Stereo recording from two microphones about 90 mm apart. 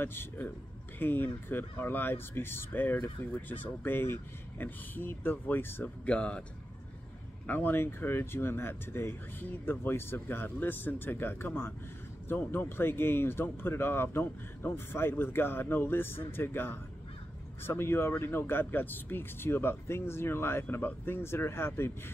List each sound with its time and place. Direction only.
0.0 s speech: 25° left (ahead or behind)
6.0 s speech: 10° left (ahead or behind)
7.4 s speech: 20° left (ahead or behind)